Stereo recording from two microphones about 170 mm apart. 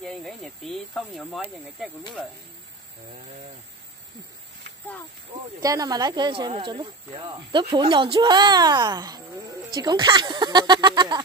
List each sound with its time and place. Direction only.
0.0 s speech: centre (ahead or behind)
5.6 s speech: 20° right (ahead or behind)